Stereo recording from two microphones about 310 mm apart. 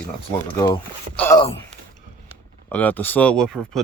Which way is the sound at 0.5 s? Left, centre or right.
Centre.